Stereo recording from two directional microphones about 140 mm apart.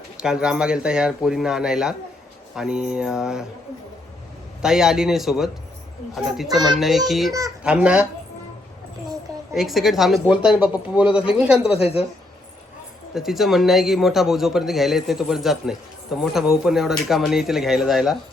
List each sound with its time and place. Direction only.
0.2 s a man's voice: 5° right (ahead or behind)
4.6 s a man's voice: 5° right (ahead or behind)
9.6 s a man's voice: centre (ahead or behind)
11.7 s a woman's voice: 45° left (ahead or behind)
13.1 s a man's voice: centre (ahead or behind)